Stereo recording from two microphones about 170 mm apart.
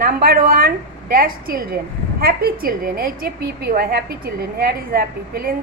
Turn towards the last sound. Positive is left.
turn(degrees=-60)  # may be behind; listen again after turning